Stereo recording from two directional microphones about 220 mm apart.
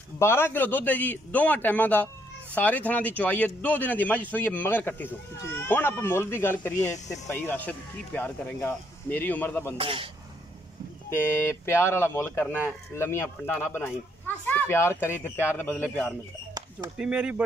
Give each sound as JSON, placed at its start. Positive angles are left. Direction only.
{"t": 0.2, "sound": "speech", "side_deg": 10}
{"t": 9.8, "sound": "speech", "side_deg": -25}
{"t": 11.1, "sound": "speech", "side_deg": 10}